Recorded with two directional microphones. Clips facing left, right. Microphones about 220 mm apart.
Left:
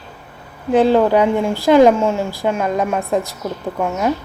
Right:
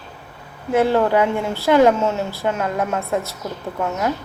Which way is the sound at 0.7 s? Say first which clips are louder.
Left 4 dB; 15° left (ahead or behind).